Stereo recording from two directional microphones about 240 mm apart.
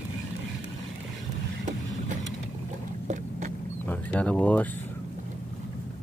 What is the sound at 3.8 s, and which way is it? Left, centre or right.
Speech, centre.